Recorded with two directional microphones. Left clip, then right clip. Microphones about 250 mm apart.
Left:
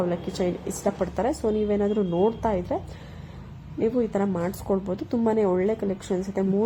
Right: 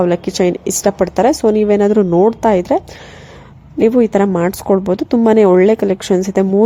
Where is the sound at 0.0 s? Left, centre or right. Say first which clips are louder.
Right 13 dB; right.